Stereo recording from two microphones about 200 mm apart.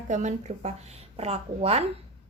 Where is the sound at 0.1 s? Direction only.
35° right (ahead or behind).